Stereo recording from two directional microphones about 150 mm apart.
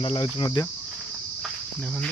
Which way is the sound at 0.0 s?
35° left (ahead or behind).